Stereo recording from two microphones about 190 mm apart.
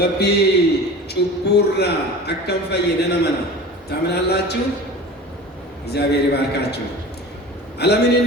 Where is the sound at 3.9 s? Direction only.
60° left (ahead or behind).